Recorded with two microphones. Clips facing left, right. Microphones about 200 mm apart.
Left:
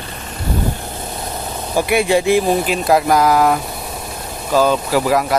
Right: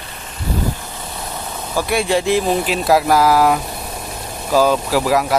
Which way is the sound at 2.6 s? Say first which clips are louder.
Even; centre (ahead or behind).